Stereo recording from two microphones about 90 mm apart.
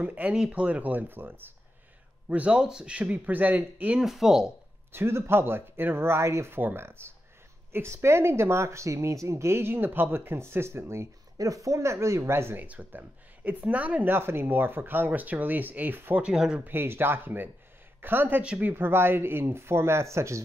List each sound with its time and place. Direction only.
0.0 s speech: 15° right (ahead or behind)
4.0 s speech: 5° right (ahead or behind)
4.9 s speech: 30° right (ahead or behind)
12.6 s speech: 20° right (ahead or behind)
16.6 s speech: 25° right (ahead or behind)